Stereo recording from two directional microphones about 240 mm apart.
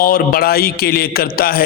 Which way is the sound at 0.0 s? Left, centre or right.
Left.